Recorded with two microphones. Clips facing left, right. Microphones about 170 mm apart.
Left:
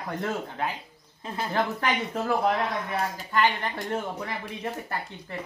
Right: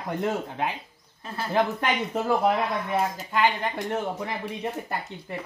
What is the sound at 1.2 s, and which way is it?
Speech, 20° left (ahead or behind).